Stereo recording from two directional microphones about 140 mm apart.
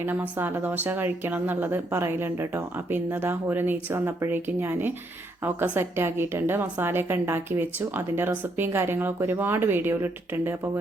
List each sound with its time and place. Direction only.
0.0 s speech: 15° right (ahead or behind)